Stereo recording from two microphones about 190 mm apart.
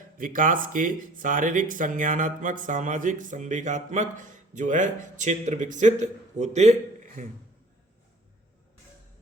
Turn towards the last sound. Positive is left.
turn(degrees=-40)  # may be behind; listen again after turning